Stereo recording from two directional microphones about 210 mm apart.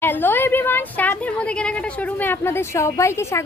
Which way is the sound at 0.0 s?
10° left (ahead or behind).